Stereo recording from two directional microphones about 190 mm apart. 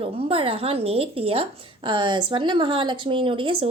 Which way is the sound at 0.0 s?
30° right (ahead or behind).